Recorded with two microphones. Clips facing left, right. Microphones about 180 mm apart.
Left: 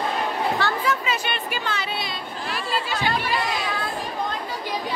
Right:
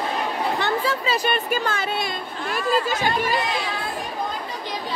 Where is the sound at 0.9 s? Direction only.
35° right (ahead or behind).